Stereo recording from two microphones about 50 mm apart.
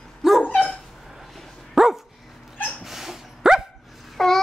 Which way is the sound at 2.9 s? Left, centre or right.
Centre.